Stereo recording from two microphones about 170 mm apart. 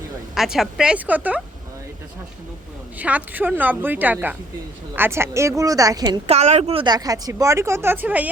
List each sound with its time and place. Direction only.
0.3 s a woman's voice: centre (ahead or behind)
3.0 s a woman's voice: 10° right (ahead or behind)
6.2 s speech: 40° right (ahead or behind); by 8.3 s 10° right (ahead or behind)